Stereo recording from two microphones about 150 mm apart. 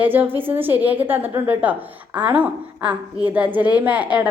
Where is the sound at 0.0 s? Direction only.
15° right (ahead or behind).